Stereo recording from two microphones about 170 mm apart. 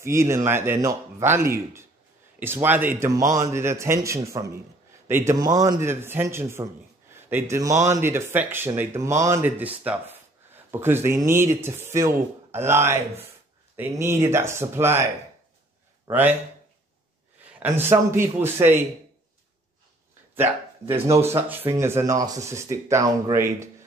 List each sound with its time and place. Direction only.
0.0 s a man's voice: 15° right (ahead or behind)
16.1 s speech: 10° right (ahead or behind)
17.6 s speech: 10° right (ahead or behind)
20.3 s speech: 15° right (ahead or behind)